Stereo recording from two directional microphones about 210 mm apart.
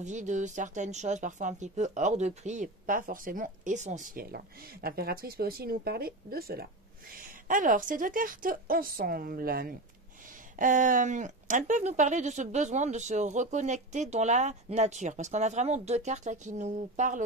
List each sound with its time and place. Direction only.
0.0 s speech: 35° right (ahead or behind)